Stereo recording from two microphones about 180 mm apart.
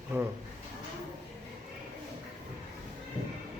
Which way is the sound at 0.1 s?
10° right (ahead or behind).